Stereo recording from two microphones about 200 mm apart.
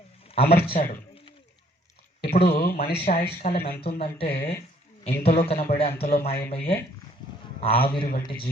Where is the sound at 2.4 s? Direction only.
50° left (ahead or behind).